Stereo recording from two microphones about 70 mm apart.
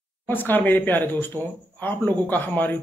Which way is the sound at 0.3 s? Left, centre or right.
Left.